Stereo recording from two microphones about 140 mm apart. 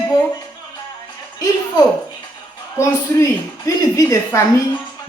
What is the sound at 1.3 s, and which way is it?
Speech, 25° left (ahead or behind).